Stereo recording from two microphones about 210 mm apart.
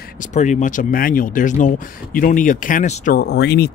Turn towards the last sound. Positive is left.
turn(degrees=50)  # may be behind; listen again after turning